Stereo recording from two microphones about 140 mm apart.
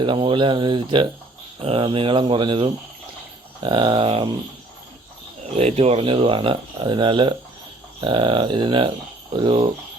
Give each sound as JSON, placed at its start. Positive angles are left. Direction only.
{"t": 0.0, "sound": "speech", "side_deg": -35}
{"t": 5.5, "sound": "speech", "side_deg": -45}